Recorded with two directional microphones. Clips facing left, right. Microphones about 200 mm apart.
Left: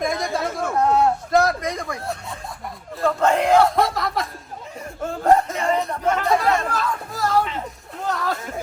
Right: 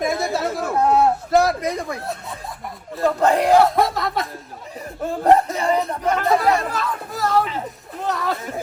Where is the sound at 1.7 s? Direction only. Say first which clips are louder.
Right 2 dB; 5° right (ahead or behind).